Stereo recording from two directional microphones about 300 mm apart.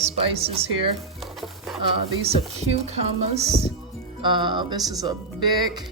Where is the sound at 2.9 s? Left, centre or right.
Right.